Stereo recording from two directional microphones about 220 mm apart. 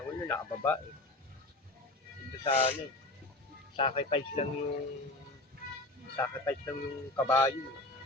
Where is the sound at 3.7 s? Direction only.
25° left (ahead or behind).